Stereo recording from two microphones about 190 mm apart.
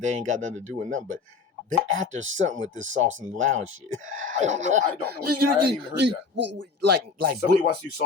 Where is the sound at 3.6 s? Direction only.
90° right.